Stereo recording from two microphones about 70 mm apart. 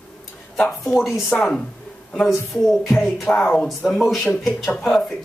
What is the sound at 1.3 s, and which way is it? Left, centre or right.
Speech, centre.